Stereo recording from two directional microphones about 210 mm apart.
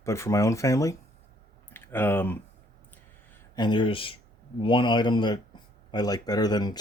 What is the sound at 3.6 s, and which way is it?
Speech, 20° left (ahead or behind).